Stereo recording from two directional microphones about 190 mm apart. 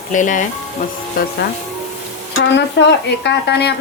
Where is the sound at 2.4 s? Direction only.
65° left (ahead or behind).